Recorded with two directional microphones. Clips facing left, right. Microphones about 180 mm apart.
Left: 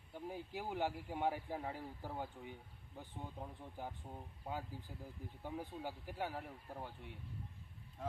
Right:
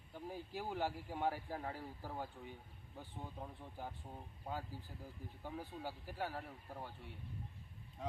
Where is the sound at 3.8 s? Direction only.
15° left (ahead or behind).